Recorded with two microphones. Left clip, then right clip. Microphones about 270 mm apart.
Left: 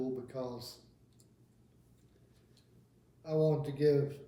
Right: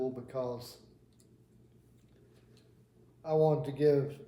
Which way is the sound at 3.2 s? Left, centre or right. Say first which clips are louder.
Right 4 dB; right.